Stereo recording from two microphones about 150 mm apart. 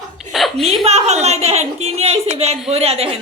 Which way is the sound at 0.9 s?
45° right (ahead or behind).